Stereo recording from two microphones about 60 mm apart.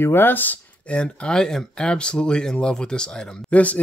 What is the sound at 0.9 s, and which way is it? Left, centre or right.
Speech, centre.